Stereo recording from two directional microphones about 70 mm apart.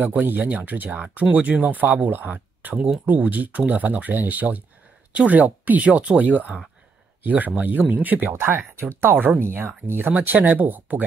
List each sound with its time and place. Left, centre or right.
0.0 s speech: right